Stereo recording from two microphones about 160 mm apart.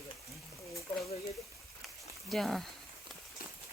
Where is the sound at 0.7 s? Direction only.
20° left (ahead or behind).